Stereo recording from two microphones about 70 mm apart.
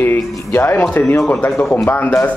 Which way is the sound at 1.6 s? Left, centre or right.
Centre.